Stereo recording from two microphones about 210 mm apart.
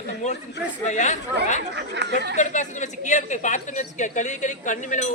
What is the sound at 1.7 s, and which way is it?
Speech, 55° right (ahead or behind).